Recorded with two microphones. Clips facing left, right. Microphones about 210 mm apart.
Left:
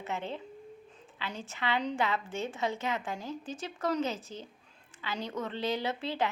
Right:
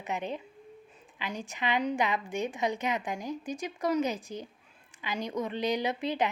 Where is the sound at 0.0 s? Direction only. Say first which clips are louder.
Right 2 dB; 15° right (ahead or behind).